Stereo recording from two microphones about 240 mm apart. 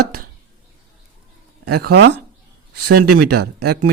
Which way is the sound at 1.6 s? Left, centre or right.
Right.